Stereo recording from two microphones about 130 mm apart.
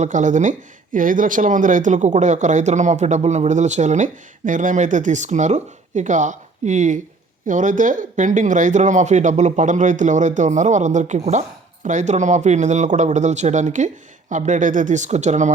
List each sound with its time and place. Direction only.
0.0 s speech: 70° right (ahead or behind)
0.9 s speech: 90° right; by 15.5 s 65° right (ahead or behind)